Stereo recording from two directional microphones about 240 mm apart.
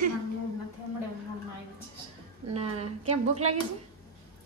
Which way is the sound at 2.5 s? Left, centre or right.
Right.